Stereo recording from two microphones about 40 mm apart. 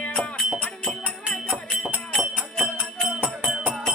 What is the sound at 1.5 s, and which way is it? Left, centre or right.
Music, right.